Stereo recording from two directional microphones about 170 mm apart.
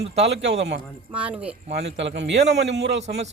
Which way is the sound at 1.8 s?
90° right.